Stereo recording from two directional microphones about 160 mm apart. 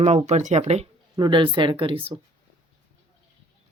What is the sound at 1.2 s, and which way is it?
Speech, 30° right (ahead or behind).